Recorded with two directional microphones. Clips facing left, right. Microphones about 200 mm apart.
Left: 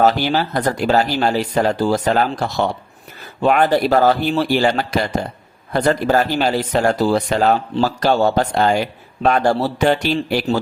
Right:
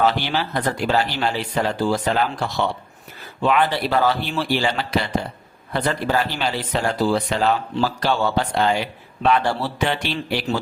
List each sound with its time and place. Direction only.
0.0 s speech: 40° left (ahead or behind)